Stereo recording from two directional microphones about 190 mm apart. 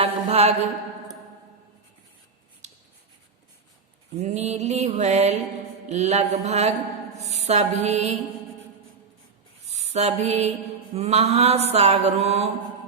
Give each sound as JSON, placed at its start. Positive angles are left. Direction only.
{"t": 0.0, "sound": "mantra", "side_deg": -30}
{"t": 2.6, "sound": "a sound", "side_deg": -40}
{"t": 4.2, "sound": "mantra", "side_deg": -35}
{"t": 7.2, "sound": "music", "side_deg": -35}
{"t": 9.6, "sound": "a sound", "side_deg": -35}
{"t": 10.9, "sound": "mantra", "side_deg": -35}